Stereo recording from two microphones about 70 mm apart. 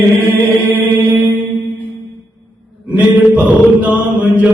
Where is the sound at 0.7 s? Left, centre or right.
Right.